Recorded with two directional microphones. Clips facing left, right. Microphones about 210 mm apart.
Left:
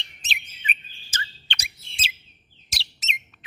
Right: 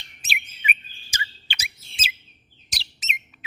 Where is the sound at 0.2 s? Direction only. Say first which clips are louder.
Right 4 dB; 10° right (ahead or behind).